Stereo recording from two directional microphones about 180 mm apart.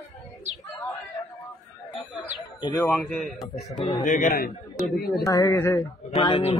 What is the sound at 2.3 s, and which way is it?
Speech, 25° left (ahead or behind).